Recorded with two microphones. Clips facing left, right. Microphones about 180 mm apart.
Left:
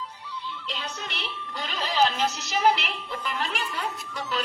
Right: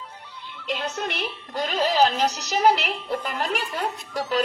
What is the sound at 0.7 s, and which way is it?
A woman's voice, 50° right (ahead or behind).